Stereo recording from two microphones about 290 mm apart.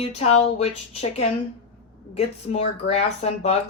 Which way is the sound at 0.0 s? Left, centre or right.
Left.